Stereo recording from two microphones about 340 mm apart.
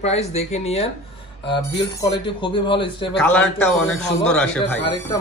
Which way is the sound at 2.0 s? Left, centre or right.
Centre.